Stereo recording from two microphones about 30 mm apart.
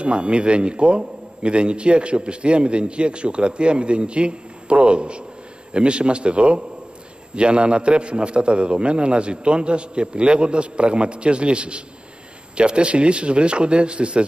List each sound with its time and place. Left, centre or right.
0.0 s a man's voice: right